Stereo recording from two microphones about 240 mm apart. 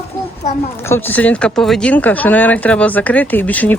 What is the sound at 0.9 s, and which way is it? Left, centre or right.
Speech, centre.